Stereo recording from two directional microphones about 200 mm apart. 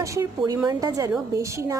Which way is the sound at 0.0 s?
15° right (ahead or behind).